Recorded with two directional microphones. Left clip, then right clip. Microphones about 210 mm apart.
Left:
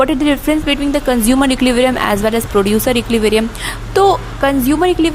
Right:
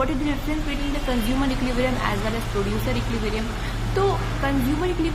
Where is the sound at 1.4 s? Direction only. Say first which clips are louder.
Left 12 dB; 50° left (ahead or behind).